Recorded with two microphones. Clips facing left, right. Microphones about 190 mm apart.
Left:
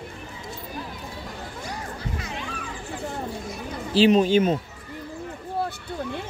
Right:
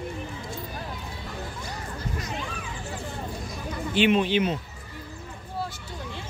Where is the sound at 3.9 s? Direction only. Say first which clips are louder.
Left 5 dB; 35° left (ahead or behind).